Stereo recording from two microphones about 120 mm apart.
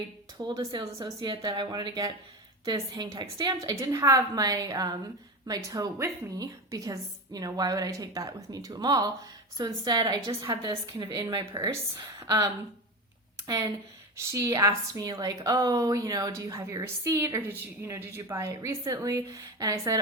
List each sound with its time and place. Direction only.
0.3 s a woman's voice: 30° right (ahead or behind)
13.5 s a woman's voice: 30° right (ahead or behind)